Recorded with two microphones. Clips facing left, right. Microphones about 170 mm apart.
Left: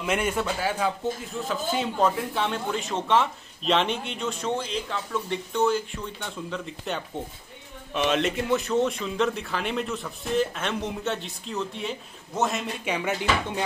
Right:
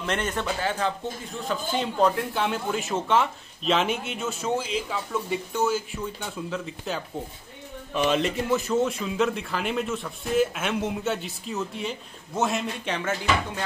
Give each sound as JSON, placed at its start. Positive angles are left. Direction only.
{"t": 0.0, "sound": "a man's voice", "side_deg": 10}
{"t": 12.9, "sound": "speech", "side_deg": 15}